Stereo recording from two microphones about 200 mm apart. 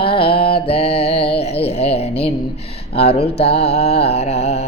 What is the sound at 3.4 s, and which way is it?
Mantra, 30° left (ahead or behind).